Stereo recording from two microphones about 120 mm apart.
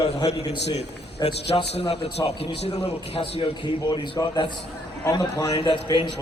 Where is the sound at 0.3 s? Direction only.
60° left (ahead or behind).